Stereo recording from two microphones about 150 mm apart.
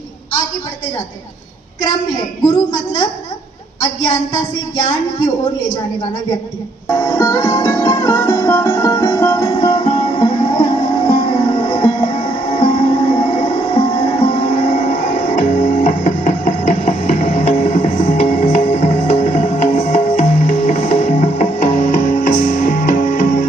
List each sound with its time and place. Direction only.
4.8 s a woman's voice: 55° left (ahead or behind)
7.1 s music: 20° left (ahead or behind)
9.1 s music: 15° left (ahead or behind)
9.6 s music: 40° left (ahead or behind); by 23.5 s 60° left (ahead or behind)